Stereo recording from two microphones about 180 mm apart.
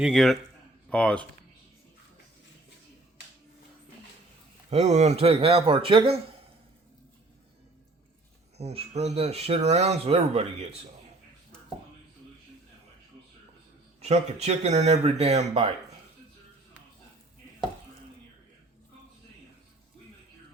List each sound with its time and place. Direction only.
0.0 s a man's voice: centre (ahead or behind)
4.7 s speech: 40° right (ahead or behind)
8.5 s speech: 35° right (ahead or behind)
14.0 s speech: 35° right (ahead or behind)